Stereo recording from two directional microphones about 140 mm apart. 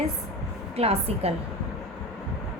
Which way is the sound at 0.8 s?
45° right (ahead or behind).